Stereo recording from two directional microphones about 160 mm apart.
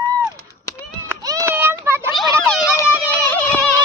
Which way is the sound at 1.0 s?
20° right (ahead or behind).